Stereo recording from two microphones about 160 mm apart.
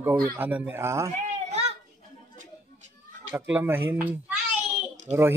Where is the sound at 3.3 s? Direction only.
10° right (ahead or behind).